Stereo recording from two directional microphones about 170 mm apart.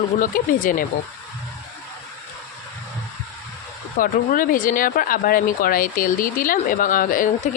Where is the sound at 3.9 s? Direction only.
55° left (ahead or behind).